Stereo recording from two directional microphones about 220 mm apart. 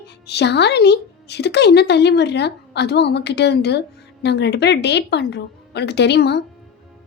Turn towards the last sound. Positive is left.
turn(degrees=50)  # may be behind; listen again after turning